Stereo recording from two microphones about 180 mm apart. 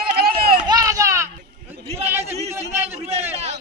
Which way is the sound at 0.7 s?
20° right (ahead or behind).